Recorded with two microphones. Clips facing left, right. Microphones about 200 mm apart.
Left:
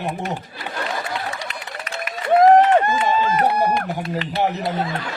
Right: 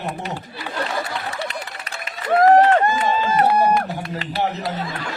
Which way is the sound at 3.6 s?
20° left (ahead or behind).